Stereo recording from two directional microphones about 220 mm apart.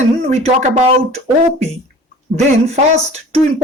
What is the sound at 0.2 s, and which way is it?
Speech, 30° right (ahead or behind).